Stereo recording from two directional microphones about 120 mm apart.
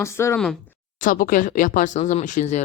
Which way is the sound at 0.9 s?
90° left.